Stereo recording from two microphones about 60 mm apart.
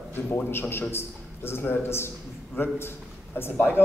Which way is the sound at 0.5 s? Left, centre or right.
Left.